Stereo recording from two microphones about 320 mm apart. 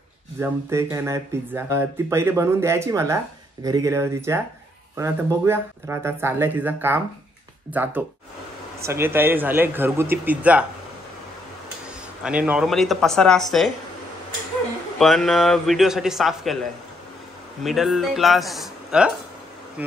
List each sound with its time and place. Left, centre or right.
0.4 s a man's voice: centre
12.2 s a man's voice: centre
15.0 s a man's voice: centre
17.6 s a man's voice: centre